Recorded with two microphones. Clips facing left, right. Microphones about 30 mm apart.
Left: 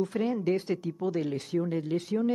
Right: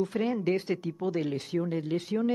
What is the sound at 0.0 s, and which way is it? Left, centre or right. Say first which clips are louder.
A woman's voice: even; centre.